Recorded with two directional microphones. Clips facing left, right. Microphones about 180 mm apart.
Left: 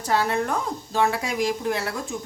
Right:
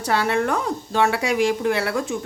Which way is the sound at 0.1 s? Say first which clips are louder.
Right 2 dB; 75° right (ahead or behind).